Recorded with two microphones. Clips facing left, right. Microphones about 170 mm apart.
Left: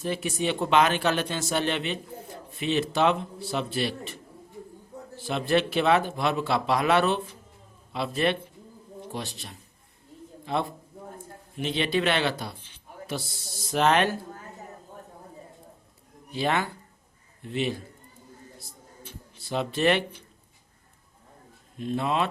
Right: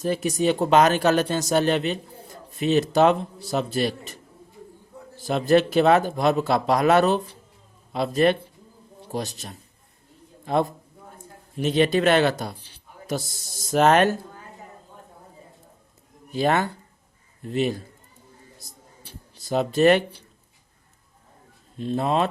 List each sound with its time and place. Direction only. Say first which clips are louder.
0.0 s a man's voice: right 6 dB; 40° right (ahead or behind)
16.3 s a man's voice: right 5 dB; 45° right (ahead or behind)
18.6 s a sound: left 2 dB; 40° right (ahead or behind)
21.8 s speech: right 4 dB; 35° right (ahead or behind)